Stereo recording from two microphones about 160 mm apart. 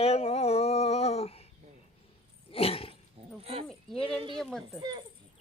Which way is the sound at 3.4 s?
40° right (ahead or behind).